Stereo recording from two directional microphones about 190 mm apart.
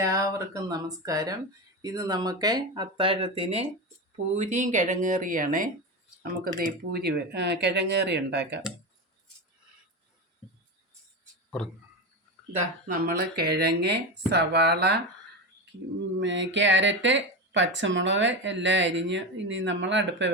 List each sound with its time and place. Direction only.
0.0 s speech: 15° right (ahead or behind); by 8.6 s 65° right (ahead or behind)
12.9 s speech: 55° right (ahead or behind)
16.2 s speech: 70° right (ahead or behind)